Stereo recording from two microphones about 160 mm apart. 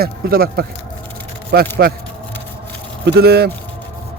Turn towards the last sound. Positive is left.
turn(degrees=-90)